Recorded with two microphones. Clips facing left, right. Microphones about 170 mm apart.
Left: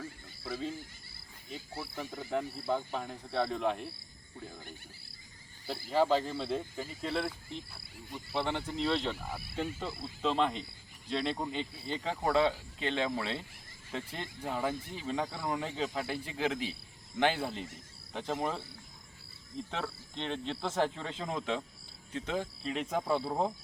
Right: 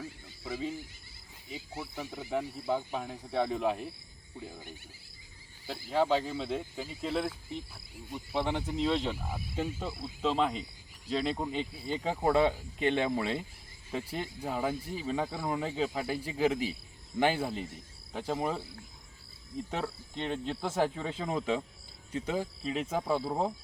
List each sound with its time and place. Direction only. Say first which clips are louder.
0.0 s a sound: right 1 dB; 10° right (ahead or behind)
1.7 s speech: right 1 dB; 15° right (ahead or behind)
5.6 s speech: even; 5° left (ahead or behind)
8.3 s speech: right 2 dB; 15° right (ahead or behind)
19.7 s speech: right 3 dB; 10° right (ahead or behind)